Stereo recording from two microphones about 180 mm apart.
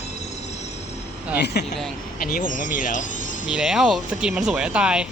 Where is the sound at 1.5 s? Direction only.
65° left (ahead or behind).